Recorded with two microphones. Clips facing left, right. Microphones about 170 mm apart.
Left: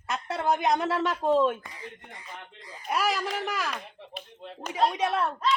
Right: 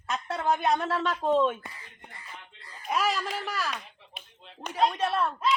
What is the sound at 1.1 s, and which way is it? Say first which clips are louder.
Speech: left 1 dB; 5° left (ahead or behind).